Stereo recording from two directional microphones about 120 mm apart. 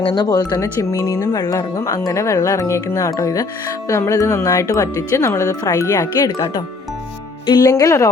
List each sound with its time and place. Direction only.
0.0 s speech: 40° left (ahead or behind)
7.4 s speech: 40° left (ahead or behind)
7.7 s speech: 25° left (ahead or behind)